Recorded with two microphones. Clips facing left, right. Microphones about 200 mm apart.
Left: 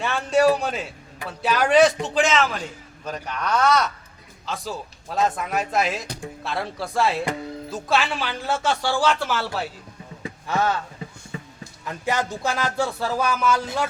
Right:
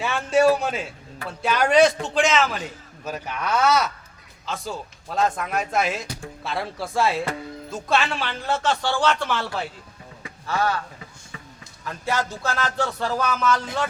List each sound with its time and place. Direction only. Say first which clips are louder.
0.0 s speech: even; centre (ahead or behind)
10.4 s speech: left 1 dB; 20° left (ahead or behind)
11.9 s music: left 1 dB; 15° left (ahead or behind)